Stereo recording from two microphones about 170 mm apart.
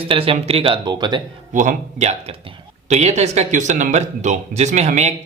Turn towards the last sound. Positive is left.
turn(degrees=-40)  # may be behind; listen again after turning